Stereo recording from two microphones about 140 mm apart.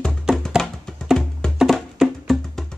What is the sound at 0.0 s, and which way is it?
Music, centre (ahead or behind).